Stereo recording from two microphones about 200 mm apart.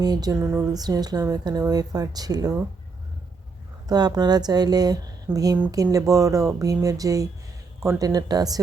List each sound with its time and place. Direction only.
0.0 s speech: 20° right (ahead or behind)
3.8 s speech: 20° right (ahead or behind)